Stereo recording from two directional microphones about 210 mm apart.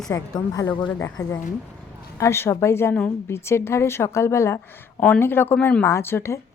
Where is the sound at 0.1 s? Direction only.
15° left (ahead or behind).